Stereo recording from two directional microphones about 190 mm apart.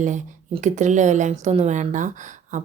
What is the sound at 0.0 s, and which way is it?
Speech, 40° right (ahead or behind).